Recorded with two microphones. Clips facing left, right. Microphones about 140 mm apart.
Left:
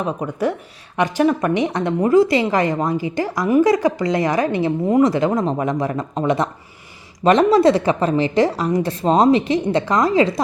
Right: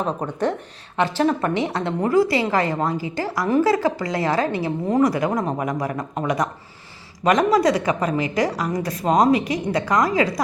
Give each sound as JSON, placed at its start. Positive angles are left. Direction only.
{"t": 0.2, "sound": "a woman's voice", "side_deg": 10}